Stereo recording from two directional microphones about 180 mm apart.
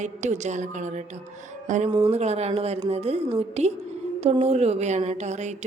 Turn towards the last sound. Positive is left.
turn(degrees=-40)  # may be behind; listen again after turning